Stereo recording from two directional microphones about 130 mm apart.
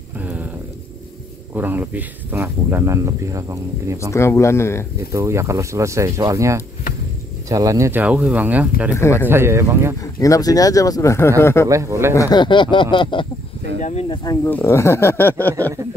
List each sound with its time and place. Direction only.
0.2 s a sound: 10° right (ahead or behind)
1.5 s speech: 15° right (ahead or behind)
4.1 s speech: 20° left (ahead or behind)
5.1 s speech: 20° right (ahead or behind)
8.0 s speech: 10° right (ahead or behind)
10.1 s speech: 25° left (ahead or behind)
11.6 s speech: 25° right (ahead or behind)
12.1 s speech: 30° left (ahead or behind)
13.7 s speech: 65° left (ahead or behind)
14.0 s speech: 30° left (ahead or behind)
14.4 s speech: 15° left (ahead or behind)